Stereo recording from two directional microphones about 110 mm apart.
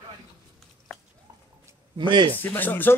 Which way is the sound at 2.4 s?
15° left (ahead or behind).